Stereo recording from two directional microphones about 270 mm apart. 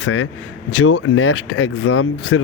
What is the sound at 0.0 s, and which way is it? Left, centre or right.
Speech, left.